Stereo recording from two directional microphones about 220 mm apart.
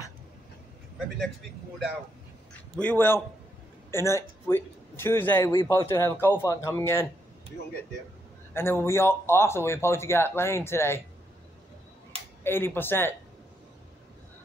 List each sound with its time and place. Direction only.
2.8 s a man's voice: 10° left (ahead or behind)
8.5 s a man's voice: 10° left (ahead or behind)
12.1 s a sound: 25° right (ahead or behind)
12.4 s a man's voice: 10° left (ahead or behind)